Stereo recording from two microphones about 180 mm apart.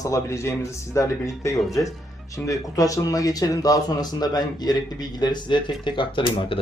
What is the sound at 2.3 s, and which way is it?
Speech, 20° left (ahead or behind).